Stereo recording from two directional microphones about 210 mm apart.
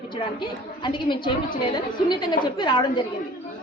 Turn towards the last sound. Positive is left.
turn(degrees=20)  # may be behind; listen again after turning